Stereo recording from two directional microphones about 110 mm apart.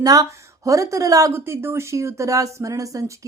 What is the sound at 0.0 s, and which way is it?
Speech, 35° right (ahead or behind).